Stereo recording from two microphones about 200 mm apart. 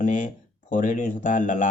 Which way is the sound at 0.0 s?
40° left (ahead or behind).